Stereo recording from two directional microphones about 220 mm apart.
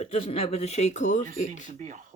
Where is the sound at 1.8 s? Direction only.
35° right (ahead or behind).